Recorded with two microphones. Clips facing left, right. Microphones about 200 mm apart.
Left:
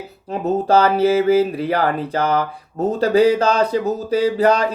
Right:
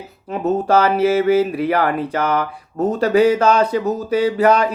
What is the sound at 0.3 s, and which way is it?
Mantra, 35° left (ahead or behind).